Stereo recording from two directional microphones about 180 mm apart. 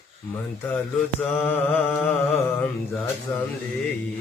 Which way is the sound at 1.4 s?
10° left (ahead or behind).